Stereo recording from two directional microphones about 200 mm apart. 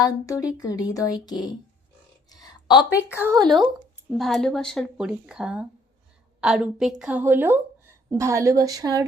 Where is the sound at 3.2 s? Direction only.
20° right (ahead or behind).